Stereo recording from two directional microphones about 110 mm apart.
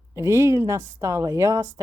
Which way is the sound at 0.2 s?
25° right (ahead or behind).